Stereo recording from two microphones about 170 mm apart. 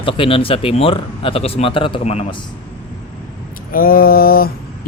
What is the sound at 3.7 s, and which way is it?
Mantra, 60° left (ahead or behind).